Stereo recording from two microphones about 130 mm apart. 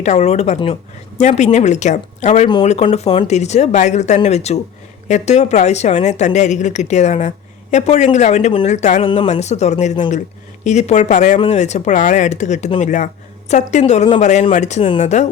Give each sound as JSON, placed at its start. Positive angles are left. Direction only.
{"t": 0.0, "sound": "a woman's voice", "side_deg": 60}
{"t": 11.3, "sound": "a woman's voice", "side_deg": 55}